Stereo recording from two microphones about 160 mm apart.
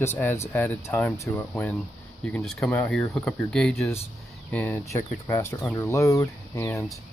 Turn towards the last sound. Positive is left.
turn(degrees=20)  # may be behind; listen again after turning